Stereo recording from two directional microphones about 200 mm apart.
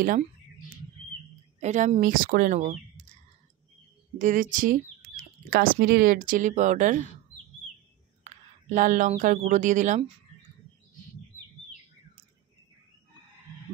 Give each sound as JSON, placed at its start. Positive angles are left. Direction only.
{"t": 1.6, "sound": "speech", "side_deg": -35}
{"t": 4.2, "sound": "speech", "side_deg": -40}
{"t": 5.0, "sound": "bird", "side_deg": -40}
{"t": 5.5, "sound": "speech", "side_deg": -45}
{"t": 8.2, "sound": "speech", "side_deg": -40}